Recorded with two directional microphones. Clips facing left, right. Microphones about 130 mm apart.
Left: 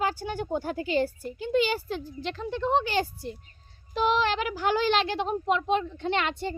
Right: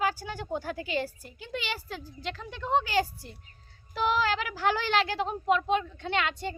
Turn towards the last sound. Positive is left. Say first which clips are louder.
# left 2 dB
turn(degrees=30)  # may be behind; listen again after turning